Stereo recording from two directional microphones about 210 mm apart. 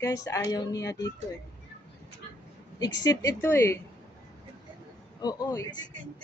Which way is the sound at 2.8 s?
15° left (ahead or behind).